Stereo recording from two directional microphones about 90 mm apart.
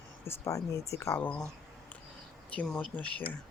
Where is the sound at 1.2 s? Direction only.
10° left (ahead or behind).